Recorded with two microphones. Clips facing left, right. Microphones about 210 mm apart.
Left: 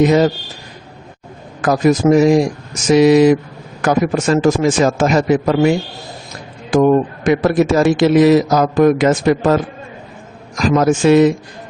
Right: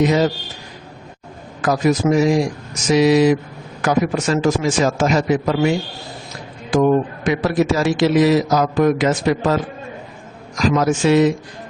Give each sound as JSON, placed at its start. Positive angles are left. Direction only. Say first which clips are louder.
{"t": 0.0, "sound": "a man's voice", "louder": "left 4 dB", "side_deg": 50}
{"t": 1.6, "sound": "a man's voice", "louder": "left 4 dB", "side_deg": 50}
{"t": 10.8, "sound": "a man's voice", "louder": "left 5 dB", "side_deg": 50}